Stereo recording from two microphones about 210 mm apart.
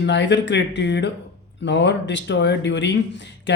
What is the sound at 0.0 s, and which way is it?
Speech, 55° left (ahead or behind).